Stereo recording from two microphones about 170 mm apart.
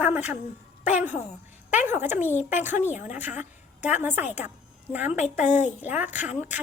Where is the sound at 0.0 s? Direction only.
10° right (ahead or behind).